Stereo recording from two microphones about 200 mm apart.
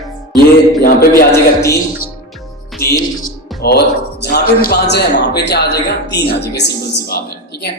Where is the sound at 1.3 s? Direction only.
15° left (ahead or behind).